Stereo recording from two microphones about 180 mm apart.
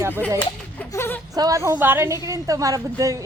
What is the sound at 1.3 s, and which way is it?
Speech, 20° right (ahead or behind).